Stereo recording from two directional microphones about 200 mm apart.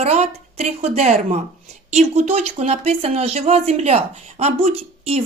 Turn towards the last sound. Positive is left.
turn(degrees=-30)  # may be behind; listen again after turning